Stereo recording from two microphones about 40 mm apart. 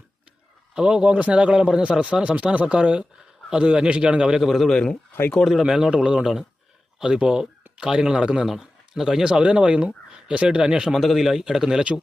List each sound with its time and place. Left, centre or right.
0.8 s speech: right
1.8 s speech: right
4.4 s a man's voice: centre
5.6 s speech: centre
9.2 s speech: right
10.9 s a man's voice: centre
11.4 s speech: centre